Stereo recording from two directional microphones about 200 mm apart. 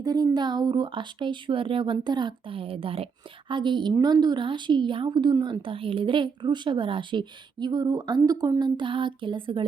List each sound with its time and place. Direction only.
0.0 s a woman's voice: 20° right (ahead or behind)